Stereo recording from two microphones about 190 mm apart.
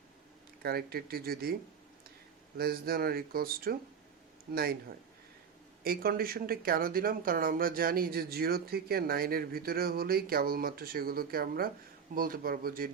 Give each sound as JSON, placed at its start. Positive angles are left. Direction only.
{"t": 0.6, "sound": "speech", "side_deg": -55}
{"t": 2.6, "sound": "speech", "side_deg": -50}
{"t": 5.8, "sound": "speech", "side_deg": -50}